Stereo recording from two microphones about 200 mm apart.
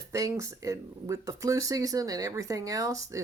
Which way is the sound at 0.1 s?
15° right (ahead or behind).